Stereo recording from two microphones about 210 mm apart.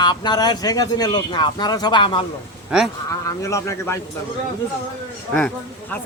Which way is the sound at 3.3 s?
15° left (ahead or behind).